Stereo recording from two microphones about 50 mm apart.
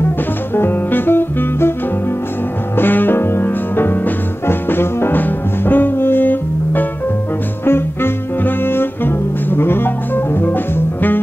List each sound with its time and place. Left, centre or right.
0.6 s music: left
2.8 s music: left
7.6 s music: left